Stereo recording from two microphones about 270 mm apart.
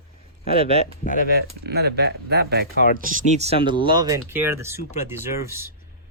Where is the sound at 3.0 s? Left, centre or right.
Right.